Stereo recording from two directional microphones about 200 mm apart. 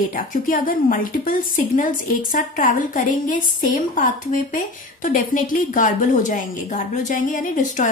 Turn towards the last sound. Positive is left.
turn(degrees=40)  # may be behind; listen again after turning